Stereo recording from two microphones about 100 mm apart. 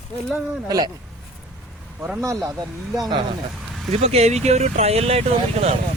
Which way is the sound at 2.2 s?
30° right (ahead or behind).